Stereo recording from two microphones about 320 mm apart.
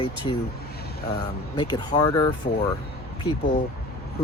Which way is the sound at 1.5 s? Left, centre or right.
Centre.